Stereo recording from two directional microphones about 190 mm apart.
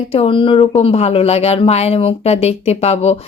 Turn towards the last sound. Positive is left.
turn(degrees=35)  # may be behind; listen again after turning